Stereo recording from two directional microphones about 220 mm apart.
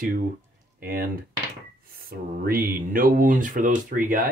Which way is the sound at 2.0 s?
40° right (ahead or behind).